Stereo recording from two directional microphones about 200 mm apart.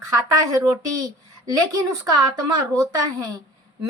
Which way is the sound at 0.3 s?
15° right (ahead or behind).